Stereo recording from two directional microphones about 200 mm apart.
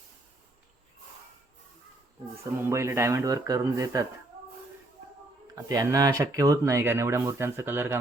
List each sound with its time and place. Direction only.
2.6 s speech: 15° right (ahead or behind)
5.5 s speech: 15° right (ahead or behind)